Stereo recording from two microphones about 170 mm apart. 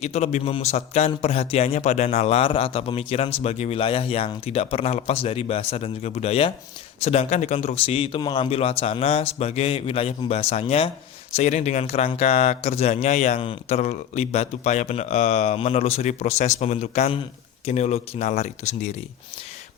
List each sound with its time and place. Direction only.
0.0 s a man's voice: 40° left (ahead or behind)